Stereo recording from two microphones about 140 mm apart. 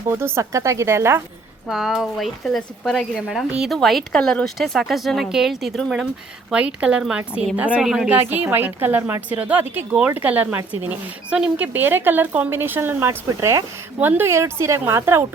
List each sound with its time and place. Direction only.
0.1 s speech: 20° right (ahead or behind)
1.6 s speech: centre (ahead or behind); by 15.2 s 20° right (ahead or behind)